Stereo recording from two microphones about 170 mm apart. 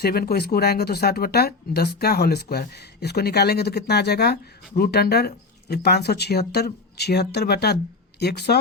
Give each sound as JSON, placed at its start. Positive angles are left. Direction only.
{"t": 0.0, "sound": "speech", "side_deg": 65}